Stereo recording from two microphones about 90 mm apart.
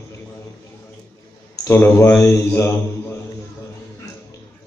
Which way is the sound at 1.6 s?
30° left (ahead or behind).